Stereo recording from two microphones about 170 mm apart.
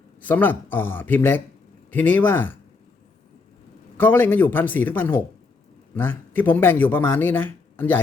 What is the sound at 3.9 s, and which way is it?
Speech, 10° left (ahead or behind).